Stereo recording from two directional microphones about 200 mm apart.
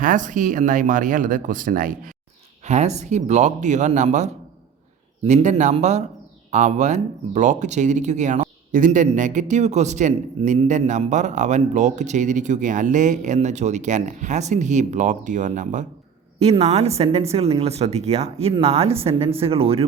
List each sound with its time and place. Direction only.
0.0 s speech: 40° right (ahead or behind)